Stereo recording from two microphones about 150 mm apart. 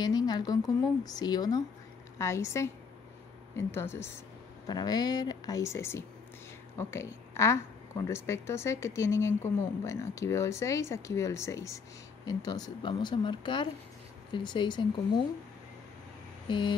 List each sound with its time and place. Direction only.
0.0 s a sound: 25° left (ahead or behind)
1.0 s a woman's voice: 25° left (ahead or behind)
4.6 s a woman's voice: 30° left (ahead or behind)
16.4 s vehicle: 35° left (ahead or behind)